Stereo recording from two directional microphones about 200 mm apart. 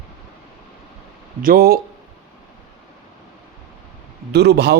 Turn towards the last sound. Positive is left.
turn(degrees=-55)  # may be behind; listen again after turning